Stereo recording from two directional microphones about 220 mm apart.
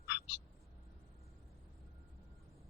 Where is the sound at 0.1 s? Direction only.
55° left (ahead or behind).